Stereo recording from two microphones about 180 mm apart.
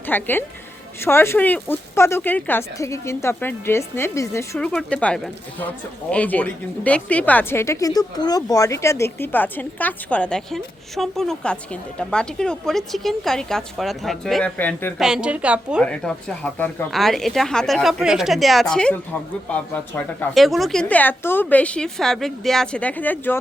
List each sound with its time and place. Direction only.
0.0 s a woman's voice: 10° left (ahead or behind)
4.5 s speech: centre (ahead or behind)
14.9 s speech: 5° right (ahead or behind)
15.8 s speech: 5° left (ahead or behind)